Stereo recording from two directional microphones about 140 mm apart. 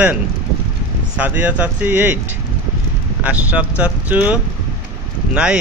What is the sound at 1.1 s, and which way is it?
Speech, 10° right (ahead or behind).